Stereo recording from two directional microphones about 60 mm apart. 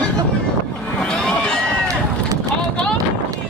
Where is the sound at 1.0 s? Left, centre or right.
Centre.